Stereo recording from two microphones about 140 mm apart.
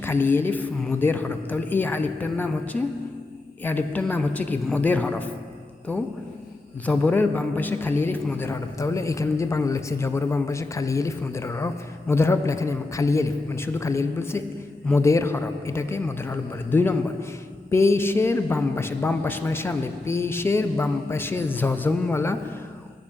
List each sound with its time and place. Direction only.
0.0 s a man's voice: 15° left (ahead or behind)
3.6 s a man's voice: 15° left (ahead or behind)